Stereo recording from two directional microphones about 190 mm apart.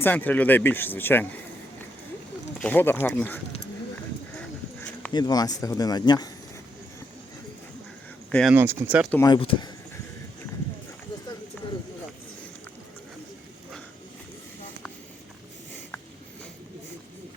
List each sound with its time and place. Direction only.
0.0 s speech: 10° left (ahead or behind)
2.6 s speech: 10° left (ahead or behind)
4.4 s a sound: 5° left (ahead or behind)
5.1 s speech: 20° left (ahead or behind)
8.3 s speech: 5° left (ahead or behind)
8.5 s speech: 10° right (ahead or behind)
9.1 s speech: 20° left (ahead or behind)